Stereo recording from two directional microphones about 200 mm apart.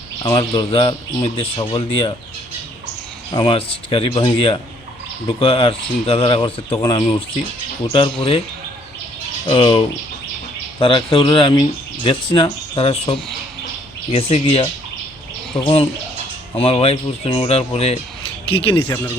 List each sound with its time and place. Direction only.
0.2 s speech: 25° left (ahead or behind)
3.3 s speech: 25° left (ahead or behind)
9.5 s speech: 25° left (ahead or behind)